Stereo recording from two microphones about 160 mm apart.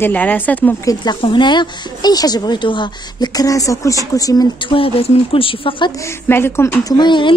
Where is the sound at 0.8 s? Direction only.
30° left (ahead or behind).